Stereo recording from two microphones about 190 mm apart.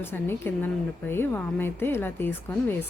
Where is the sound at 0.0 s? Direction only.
10° left (ahead or behind).